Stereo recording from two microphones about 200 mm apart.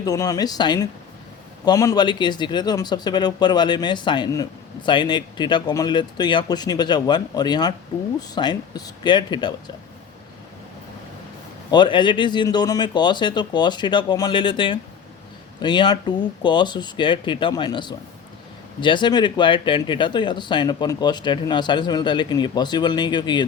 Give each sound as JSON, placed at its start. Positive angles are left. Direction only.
{"t": 0.0, "sound": "speech", "side_deg": 20}
{"t": 11.7, "sound": "speech", "side_deg": 25}